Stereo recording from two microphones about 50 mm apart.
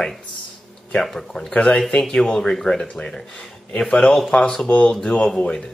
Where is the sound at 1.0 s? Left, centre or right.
Centre.